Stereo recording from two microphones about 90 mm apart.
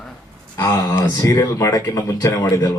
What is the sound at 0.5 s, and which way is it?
Speech, 45° left (ahead or behind).